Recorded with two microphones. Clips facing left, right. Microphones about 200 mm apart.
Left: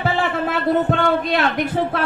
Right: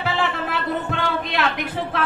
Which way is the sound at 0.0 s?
45° left (ahead or behind).